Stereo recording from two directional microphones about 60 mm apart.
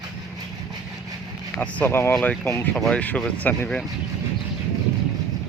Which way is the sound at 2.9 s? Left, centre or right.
Left.